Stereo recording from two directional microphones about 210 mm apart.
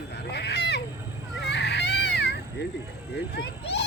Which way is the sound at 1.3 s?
55° left (ahead or behind).